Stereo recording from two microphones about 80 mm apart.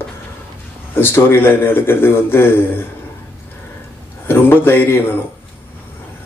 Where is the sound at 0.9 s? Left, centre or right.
Left.